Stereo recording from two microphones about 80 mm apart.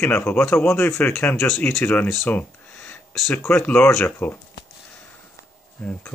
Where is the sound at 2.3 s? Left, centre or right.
Left.